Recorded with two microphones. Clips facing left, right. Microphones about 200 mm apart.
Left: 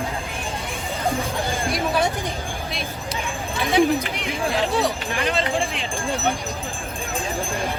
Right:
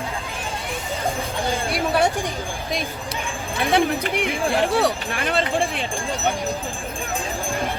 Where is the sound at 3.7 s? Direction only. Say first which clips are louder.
Left 2 dB; 60° right (ahead or behind).